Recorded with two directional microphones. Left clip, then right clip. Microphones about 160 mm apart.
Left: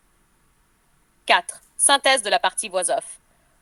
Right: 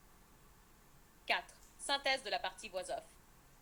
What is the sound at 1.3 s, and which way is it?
A woman's voice, 55° left (ahead or behind).